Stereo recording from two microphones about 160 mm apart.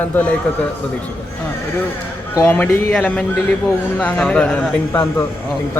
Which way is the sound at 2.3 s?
10° left (ahead or behind).